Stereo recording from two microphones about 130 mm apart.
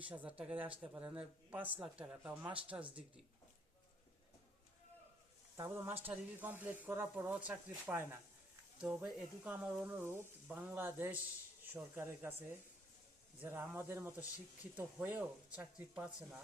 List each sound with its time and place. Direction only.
0.1 s speech: 10° right (ahead or behind)
5.5 s speech: 20° right (ahead or behind)
8.8 s speech: 5° right (ahead or behind)